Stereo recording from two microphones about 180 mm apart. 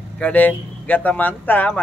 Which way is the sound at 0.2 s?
10° left (ahead or behind).